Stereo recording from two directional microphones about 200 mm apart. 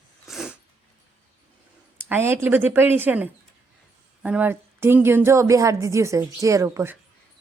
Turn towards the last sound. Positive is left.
turn(degrees=-15)  # may be behind; listen again after turning